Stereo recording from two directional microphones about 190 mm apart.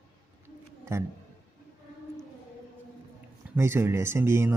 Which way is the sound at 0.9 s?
15° right (ahead or behind).